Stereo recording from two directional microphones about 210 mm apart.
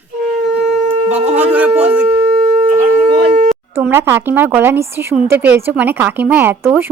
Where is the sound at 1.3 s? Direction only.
5° right (ahead or behind).